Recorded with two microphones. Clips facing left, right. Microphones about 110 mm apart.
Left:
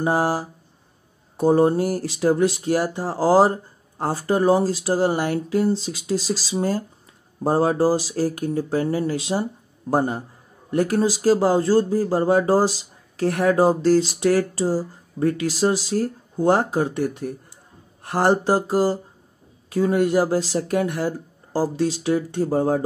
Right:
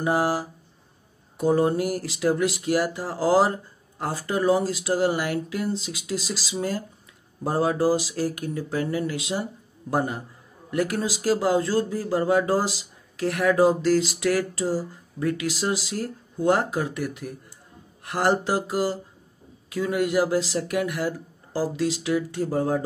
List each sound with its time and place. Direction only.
0.0 s speech: 30° left (ahead or behind)